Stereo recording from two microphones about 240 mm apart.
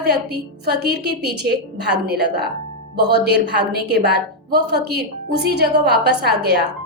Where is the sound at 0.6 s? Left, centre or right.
Right.